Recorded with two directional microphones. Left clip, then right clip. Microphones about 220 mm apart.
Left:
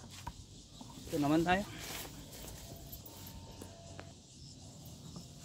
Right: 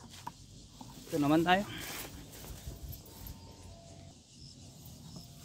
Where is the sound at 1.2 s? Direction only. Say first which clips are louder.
Right 3 dB; 30° right (ahead or behind).